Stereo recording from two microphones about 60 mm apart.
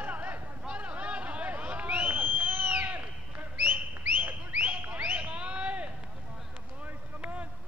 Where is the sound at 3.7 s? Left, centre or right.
Right.